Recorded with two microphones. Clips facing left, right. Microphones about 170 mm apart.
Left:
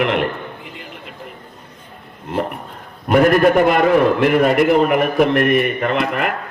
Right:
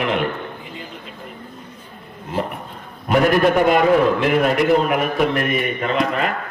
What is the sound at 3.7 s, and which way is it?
A man's voice, 55° left (ahead or behind).